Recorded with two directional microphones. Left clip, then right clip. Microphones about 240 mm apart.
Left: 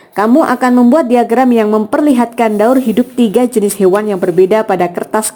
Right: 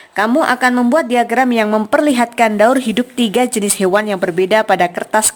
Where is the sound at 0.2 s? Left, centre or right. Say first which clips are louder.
Left 3 dB; centre.